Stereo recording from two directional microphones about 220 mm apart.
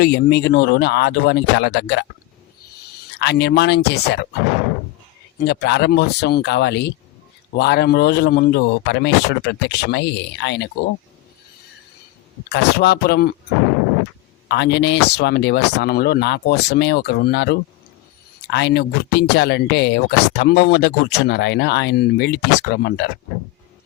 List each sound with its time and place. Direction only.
0.0 s speech: 50° left (ahead or behind)
3.2 s speech: 50° left (ahead or behind)
5.4 s speech: 50° left (ahead or behind)
12.5 s speech: 50° left (ahead or behind)
14.4 s speech: 50° left (ahead or behind)